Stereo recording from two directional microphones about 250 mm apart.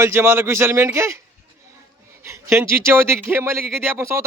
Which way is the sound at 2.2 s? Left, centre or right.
Centre.